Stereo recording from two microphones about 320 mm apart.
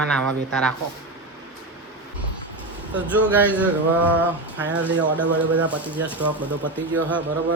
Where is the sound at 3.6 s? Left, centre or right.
Centre.